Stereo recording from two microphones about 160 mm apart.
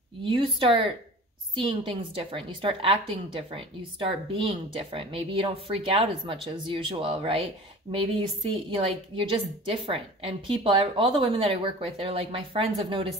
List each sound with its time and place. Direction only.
0.2 s a woman's voice: 30° right (ahead or behind)